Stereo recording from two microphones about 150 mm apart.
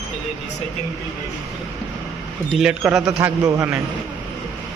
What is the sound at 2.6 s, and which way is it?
Speech, 5° right (ahead or behind).